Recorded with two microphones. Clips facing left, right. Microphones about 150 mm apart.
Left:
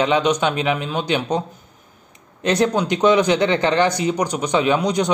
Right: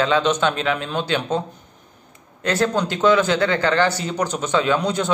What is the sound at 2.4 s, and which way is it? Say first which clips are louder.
A man's voice: left 2 dB; 20° left (ahead or behind).